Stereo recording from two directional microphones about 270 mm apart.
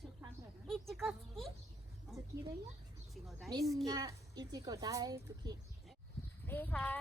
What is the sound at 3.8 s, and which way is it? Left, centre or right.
A child's voice, centre.